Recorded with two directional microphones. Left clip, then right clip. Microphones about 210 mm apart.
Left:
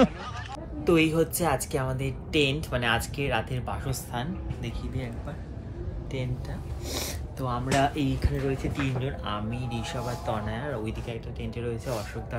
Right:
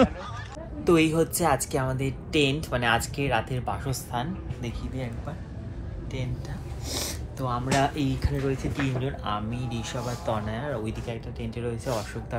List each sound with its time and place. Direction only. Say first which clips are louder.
0.8 s speech: right 1 dB; 5° left (ahead or behind)
6.9 s speech: right 1 dB; 15° left (ahead or behind)